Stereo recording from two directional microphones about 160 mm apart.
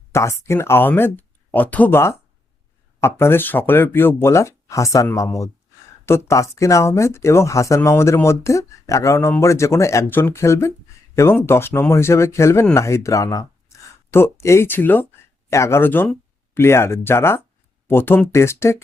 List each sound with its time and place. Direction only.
0.1 s speech: 15° left (ahead or behind)